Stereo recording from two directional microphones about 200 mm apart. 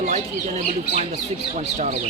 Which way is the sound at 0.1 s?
35° right (ahead or behind).